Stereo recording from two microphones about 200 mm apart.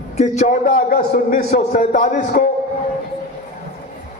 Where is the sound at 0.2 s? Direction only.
35° left (ahead or behind).